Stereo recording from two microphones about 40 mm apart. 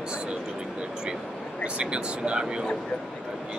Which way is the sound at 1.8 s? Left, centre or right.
Right.